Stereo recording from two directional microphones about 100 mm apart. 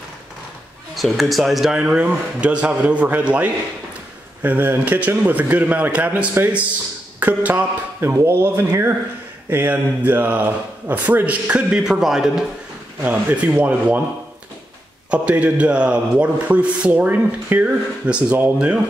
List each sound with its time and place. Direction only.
0.9 s a man's voice: centre (ahead or behind)
13.0 s a man's voice: 15° right (ahead or behind)
15.0 s a man's voice: 15° right (ahead or behind)